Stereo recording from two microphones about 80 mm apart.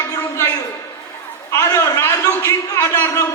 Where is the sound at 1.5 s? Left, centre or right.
Left.